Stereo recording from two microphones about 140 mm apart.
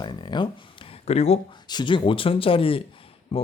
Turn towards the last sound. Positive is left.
turn(degrees=40)  # may be behind; listen again after turning